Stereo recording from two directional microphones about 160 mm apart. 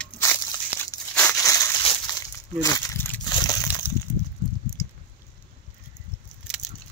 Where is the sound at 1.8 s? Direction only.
30° left (ahead or behind).